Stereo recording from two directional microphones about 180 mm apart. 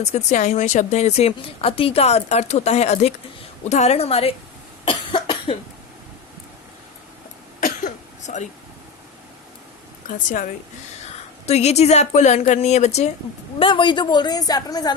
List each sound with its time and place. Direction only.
0.0 s a woman's voice: 40° left (ahead or behind)
4.9 s cough: 25° left (ahead or behind)
7.6 s cough: 45° left (ahead or behind)
10.1 s a woman's voice: 45° left (ahead or behind)
11.0 s a woman's voice: 35° left (ahead or behind); by 14.9 s 20° left (ahead or behind)